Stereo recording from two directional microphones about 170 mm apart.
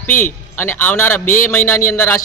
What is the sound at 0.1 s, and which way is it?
A man's voice, 15° left (ahead or behind).